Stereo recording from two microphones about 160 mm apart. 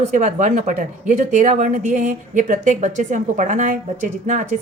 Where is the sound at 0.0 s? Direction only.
50° right (ahead or behind).